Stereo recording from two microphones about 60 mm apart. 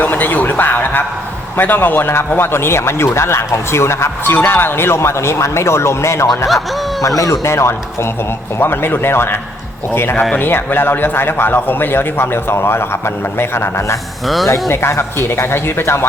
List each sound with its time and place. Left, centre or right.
0.0 s a sound: left
1.5 s a man's voice: left
4.4 s speech: left
8.5 s a man's voice: left